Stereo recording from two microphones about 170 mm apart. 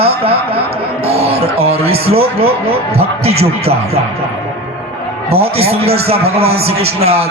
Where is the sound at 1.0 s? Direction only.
35° right (ahead or behind).